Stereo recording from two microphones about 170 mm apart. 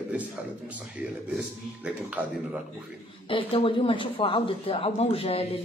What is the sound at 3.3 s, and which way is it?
Speech, 30° left (ahead or behind).